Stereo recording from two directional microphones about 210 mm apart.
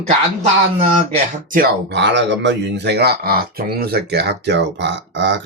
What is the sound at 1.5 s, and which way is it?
Speech, 45° right (ahead or behind).